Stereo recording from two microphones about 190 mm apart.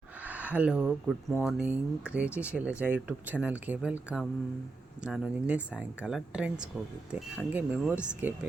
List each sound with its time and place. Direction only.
0.2 s speech: 10° right (ahead or behind)